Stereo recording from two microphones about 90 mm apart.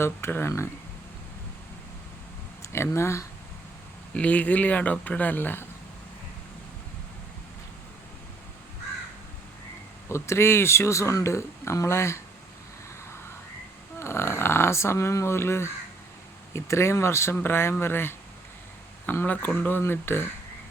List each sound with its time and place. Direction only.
0.0 s speech: 25° left (ahead or behind)
2.6 s speech: 30° left (ahead or behind)
4.1 s speech: 15° left (ahead or behind)
10.1 s speech: 30° left (ahead or behind)
14.0 s speech: 30° left (ahead or behind)